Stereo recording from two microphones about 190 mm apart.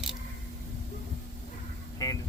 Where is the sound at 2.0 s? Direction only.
20° left (ahead or behind).